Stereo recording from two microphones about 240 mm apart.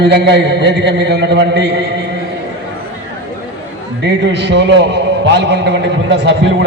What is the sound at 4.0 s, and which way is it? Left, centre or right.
A man's voice, right.